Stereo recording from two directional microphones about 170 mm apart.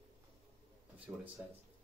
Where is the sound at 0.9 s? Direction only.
10° right (ahead or behind).